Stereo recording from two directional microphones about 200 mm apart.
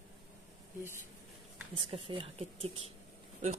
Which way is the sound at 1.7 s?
30° right (ahead or behind).